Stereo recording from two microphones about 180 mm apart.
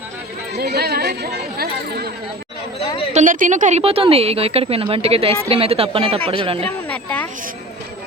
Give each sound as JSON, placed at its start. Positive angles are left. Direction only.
{"t": 0.6, "sound": "speech", "side_deg": -60}
{"t": 3.1, "sound": "a woman's voice", "side_deg": -45}
{"t": 6.7, "sound": "speech", "side_deg": 10}